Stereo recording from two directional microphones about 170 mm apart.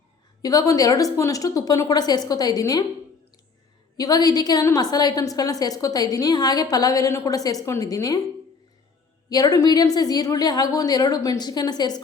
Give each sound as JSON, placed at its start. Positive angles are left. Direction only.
{"t": 0.4, "sound": "a woman's voice", "side_deg": 20}
{"t": 3.9, "sound": "a woman's voice", "side_deg": 20}
{"t": 9.3, "sound": "a woman's voice", "side_deg": 20}